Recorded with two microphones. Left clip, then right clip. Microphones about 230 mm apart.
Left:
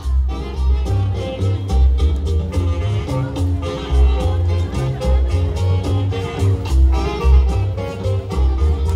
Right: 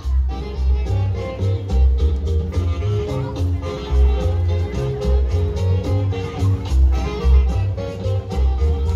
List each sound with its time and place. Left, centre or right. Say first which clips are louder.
4.7 s music: even; left